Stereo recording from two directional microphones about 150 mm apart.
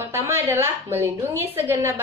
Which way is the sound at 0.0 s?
15° right (ahead or behind).